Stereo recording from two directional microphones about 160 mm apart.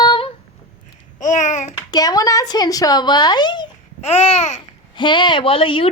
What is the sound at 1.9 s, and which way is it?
A child's voice, 25° left (ahead or behind).